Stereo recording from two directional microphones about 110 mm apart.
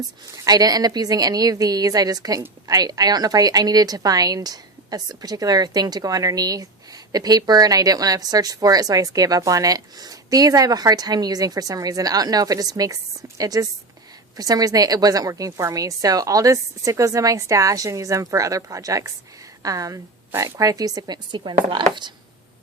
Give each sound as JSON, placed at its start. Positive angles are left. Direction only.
{"t": 0.4, "sound": "a woman's voice", "side_deg": -35}